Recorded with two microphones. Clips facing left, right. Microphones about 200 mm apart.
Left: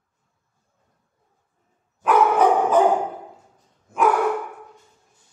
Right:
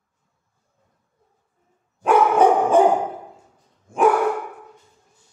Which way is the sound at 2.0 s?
30° right (ahead or behind).